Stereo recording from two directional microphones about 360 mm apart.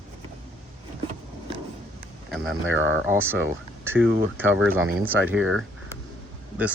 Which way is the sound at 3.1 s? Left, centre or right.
Centre.